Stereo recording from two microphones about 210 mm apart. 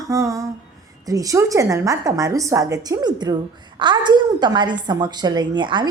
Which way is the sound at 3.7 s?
20° right (ahead or behind).